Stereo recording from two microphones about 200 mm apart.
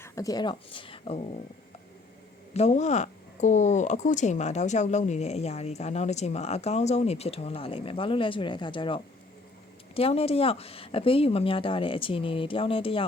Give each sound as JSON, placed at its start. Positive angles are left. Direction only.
{"t": 0.0, "sound": "speech", "side_deg": 15}
{"t": 2.5, "sound": "speech", "side_deg": 35}